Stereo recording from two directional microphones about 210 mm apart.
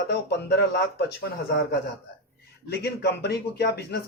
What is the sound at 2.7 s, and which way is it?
A man's voice, 50° left (ahead or behind).